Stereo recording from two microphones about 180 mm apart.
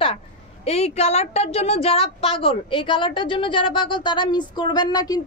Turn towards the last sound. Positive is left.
turn(degrees=20)  # may be behind; listen again after turning